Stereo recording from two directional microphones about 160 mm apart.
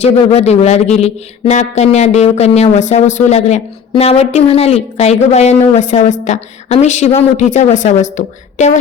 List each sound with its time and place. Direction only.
0.3 s a man's voice: 45° left (ahead or behind)